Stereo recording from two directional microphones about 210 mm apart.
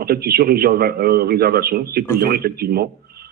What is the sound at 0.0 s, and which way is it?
A man's voice, 45° right (ahead or behind).